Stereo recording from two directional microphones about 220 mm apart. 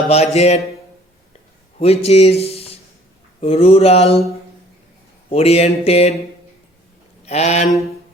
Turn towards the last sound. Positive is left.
turn(degrees=30)  # may be behind; listen again after turning